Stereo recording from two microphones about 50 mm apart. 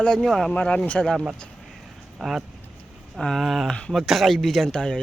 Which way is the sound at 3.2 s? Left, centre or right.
Centre.